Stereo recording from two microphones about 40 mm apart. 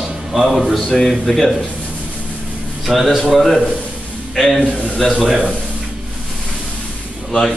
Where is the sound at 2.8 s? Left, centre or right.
Centre.